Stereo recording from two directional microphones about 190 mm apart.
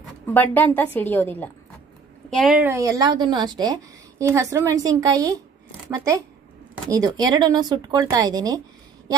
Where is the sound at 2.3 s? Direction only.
Centre (ahead or behind).